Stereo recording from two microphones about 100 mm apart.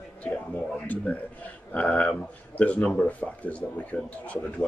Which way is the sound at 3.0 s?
15° left (ahead or behind).